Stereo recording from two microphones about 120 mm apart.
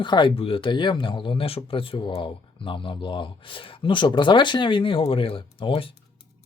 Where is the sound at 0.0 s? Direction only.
40° left (ahead or behind).